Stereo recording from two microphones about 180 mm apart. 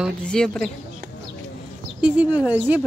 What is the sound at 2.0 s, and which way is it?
Speech, 10° right (ahead or behind).